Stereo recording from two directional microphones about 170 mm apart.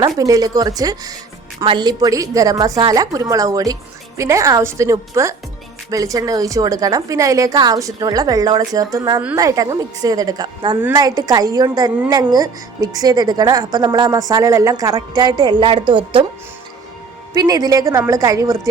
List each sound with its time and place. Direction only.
0.2 s a woman's voice: 20° right (ahead or behind)
17.3 s a woman's voice: 20° right (ahead or behind)